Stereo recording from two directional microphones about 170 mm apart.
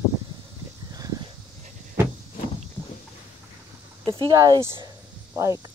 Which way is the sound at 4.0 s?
25° right (ahead or behind).